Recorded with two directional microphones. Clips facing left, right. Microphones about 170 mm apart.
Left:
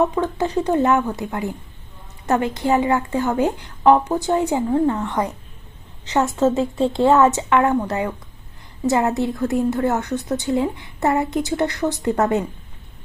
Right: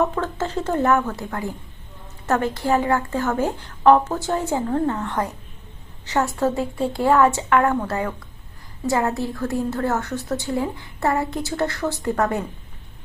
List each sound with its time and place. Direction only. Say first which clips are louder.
0.0 s a woman's voice: left 3 dB; 15° left (ahead or behind)